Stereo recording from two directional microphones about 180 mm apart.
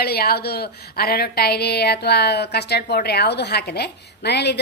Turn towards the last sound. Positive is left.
turn(degrees=70)  # may be behind; listen again after turning